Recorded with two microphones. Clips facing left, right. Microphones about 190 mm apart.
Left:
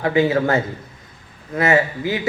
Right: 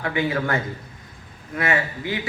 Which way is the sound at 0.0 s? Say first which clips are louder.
Left 7 dB; 25° left (ahead or behind).